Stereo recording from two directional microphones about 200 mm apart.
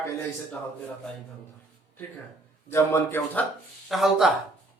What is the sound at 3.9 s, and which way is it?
Speech, centre (ahead or behind).